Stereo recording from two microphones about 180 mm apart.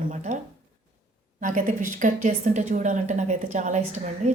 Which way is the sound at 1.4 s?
45° right (ahead or behind).